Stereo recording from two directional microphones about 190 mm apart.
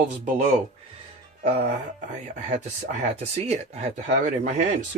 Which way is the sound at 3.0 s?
35° right (ahead or behind).